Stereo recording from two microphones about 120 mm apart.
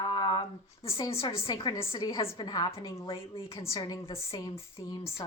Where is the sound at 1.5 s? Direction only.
40° left (ahead or behind); by 3.7 s 25° left (ahead or behind).